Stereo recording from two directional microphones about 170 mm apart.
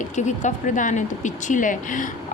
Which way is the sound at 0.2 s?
45° left (ahead or behind).